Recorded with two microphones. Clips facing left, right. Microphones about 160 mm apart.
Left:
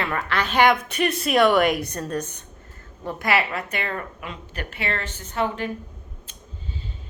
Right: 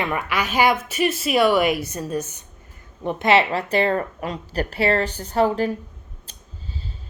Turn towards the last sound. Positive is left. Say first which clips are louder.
# right 6 dB
turn(degrees=-35)  # may be behind; listen again after turning